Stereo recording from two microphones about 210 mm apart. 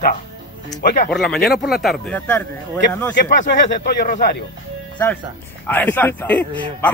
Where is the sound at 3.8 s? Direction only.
50° left (ahead or behind).